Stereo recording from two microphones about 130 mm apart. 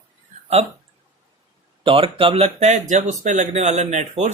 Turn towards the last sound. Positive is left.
turn(degrees=-65)  # may be behind; listen again after turning